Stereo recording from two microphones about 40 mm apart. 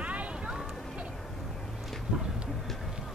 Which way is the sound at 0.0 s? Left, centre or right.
Right.